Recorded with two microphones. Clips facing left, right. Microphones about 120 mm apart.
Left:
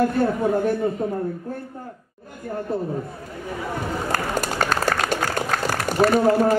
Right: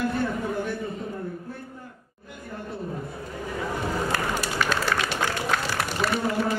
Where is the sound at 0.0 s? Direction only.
45° left (ahead or behind).